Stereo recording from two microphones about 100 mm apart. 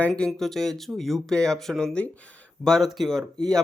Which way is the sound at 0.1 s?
5° left (ahead or behind).